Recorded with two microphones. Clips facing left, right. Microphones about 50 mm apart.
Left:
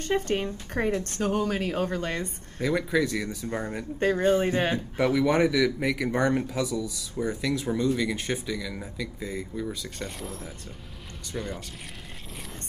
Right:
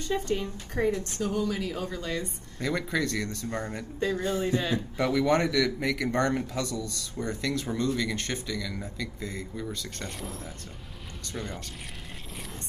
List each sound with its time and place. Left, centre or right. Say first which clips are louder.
0.1 s a woman's voice: left 3 dB; left
2.6 s speech: left 4 dB; centre
4.0 s a woman's voice: left 6 dB; left
4.9 s speech: left 2 dB; centre